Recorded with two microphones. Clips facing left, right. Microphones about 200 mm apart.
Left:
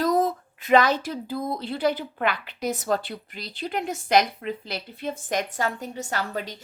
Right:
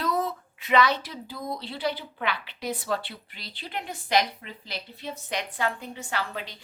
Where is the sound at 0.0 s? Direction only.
45° left (ahead or behind).